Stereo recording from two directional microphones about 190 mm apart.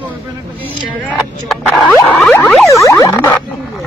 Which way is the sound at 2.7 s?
15° left (ahead or behind).